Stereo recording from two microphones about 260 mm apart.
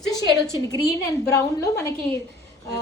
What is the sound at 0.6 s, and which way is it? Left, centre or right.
A woman's voice, centre.